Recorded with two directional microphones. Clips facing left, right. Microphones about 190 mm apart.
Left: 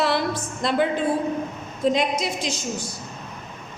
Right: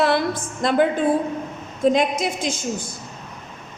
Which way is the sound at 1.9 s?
50° right (ahead or behind).